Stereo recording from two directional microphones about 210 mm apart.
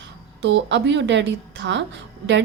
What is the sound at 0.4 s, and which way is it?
A woman's voice, 60° right (ahead or behind).